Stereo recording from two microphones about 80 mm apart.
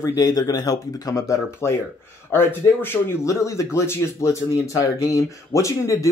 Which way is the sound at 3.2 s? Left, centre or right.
Left.